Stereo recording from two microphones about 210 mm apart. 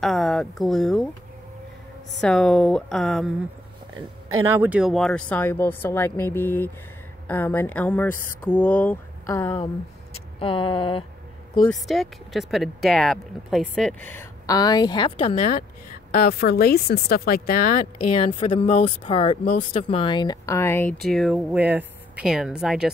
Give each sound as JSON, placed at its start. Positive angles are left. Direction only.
{"t": 0.0, "sound": "speech", "side_deg": 0}
{"t": 2.1, "sound": "speech", "side_deg": 5}
{"t": 4.3, "sound": "speech", "side_deg": -85}
{"t": 4.6, "sound": "speech", "side_deg": -5}
{"t": 10.4, "sound": "speech", "side_deg": 25}
{"t": 11.7, "sound": "speech", "side_deg": 0}
{"t": 15.1, "sound": "speech", "side_deg": 35}
{"t": 16.1, "sound": "speech", "side_deg": 45}
{"t": 19.4, "sound": "speech", "side_deg": 40}